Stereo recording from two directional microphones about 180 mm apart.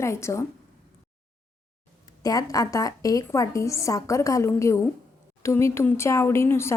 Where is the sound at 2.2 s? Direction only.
20° left (ahead or behind).